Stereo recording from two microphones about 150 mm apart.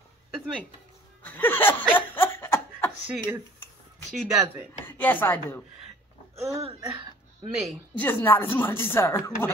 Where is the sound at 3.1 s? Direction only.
10° right (ahead or behind).